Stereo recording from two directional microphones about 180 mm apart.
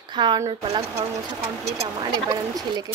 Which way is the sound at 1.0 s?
15° right (ahead or behind).